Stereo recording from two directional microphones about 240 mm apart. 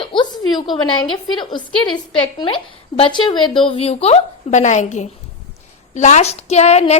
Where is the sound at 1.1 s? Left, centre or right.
Centre.